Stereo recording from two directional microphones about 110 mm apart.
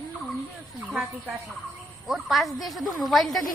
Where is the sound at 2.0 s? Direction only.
Centre (ahead or behind).